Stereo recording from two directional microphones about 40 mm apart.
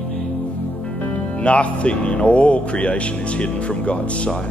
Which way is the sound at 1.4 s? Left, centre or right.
Left.